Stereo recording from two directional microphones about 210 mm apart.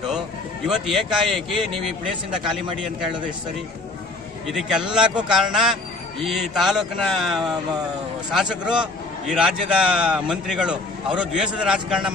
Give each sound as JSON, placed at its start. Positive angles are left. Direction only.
{"t": 0.7, "sound": "a man's voice", "side_deg": 0}
{"t": 4.5, "sound": "a man's voice", "side_deg": 0}